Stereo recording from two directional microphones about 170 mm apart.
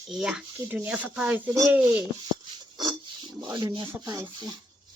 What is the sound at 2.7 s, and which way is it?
Rub, 25° right (ahead or behind).